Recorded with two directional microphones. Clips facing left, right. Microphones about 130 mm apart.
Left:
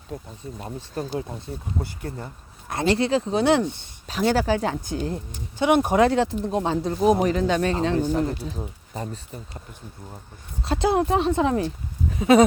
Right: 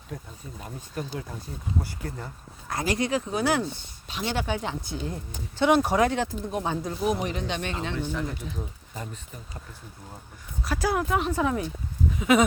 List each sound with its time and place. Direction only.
0.1 s speech: 25° left (ahead or behind)
1.8 s speech: 25° left (ahead or behind)
4.1 s speech: 40° left (ahead or behind)
5.1 s speech: 15° left (ahead or behind)
6.0 s speech: 30° left (ahead or behind)
10.6 s speech: 25° left (ahead or behind)